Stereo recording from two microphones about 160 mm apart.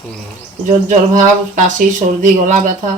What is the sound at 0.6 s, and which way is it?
Speech, 55° right (ahead or behind).